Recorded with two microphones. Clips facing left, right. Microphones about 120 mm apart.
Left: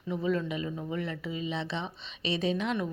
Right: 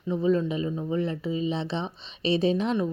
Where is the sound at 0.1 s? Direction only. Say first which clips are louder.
Right 6 dB; 30° right (ahead or behind).